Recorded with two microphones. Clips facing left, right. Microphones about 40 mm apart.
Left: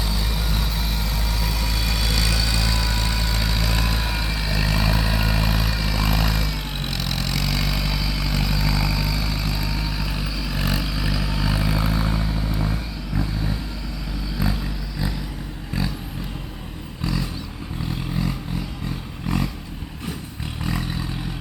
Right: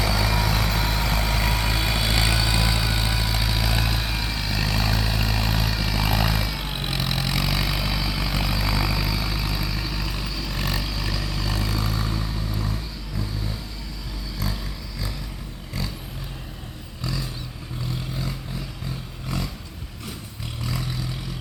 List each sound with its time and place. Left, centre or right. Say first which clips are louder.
0.0 s vehicle: right 5 dB; right; by 12.7 s left
14.4 s roaring cats: left 6 dB; left